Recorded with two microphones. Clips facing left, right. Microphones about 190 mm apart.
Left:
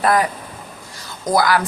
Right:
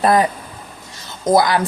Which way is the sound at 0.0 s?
25° right (ahead or behind).